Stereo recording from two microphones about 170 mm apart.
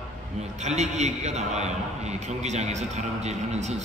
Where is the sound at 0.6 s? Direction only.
40° right (ahead or behind).